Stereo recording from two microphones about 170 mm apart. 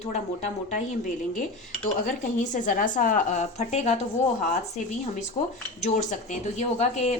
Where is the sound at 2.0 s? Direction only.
50° left (ahead or behind).